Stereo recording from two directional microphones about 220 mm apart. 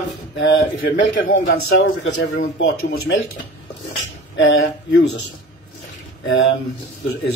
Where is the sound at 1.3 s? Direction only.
45° left (ahead or behind).